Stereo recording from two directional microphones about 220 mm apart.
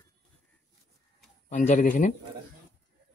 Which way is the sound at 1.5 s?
35° left (ahead or behind).